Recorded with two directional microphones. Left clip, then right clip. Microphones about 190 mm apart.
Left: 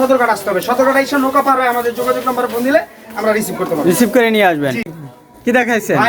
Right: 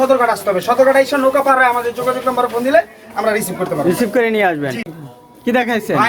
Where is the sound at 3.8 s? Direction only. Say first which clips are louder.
Left 3 dB; 15° left (ahead or behind).